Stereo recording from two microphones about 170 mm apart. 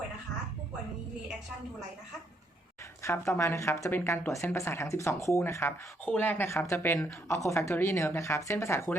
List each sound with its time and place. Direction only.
3.0 s a woman's voice: 15° left (ahead or behind)